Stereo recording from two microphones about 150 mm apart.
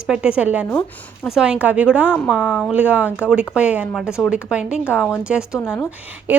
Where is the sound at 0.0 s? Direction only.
5° right (ahead or behind).